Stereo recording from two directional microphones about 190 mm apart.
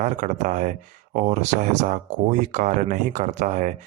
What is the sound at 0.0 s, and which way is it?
Speech, 40° right (ahead or behind).